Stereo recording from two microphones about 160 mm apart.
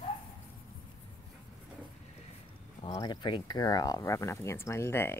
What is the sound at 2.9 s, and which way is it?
Speech, 25° left (ahead or behind).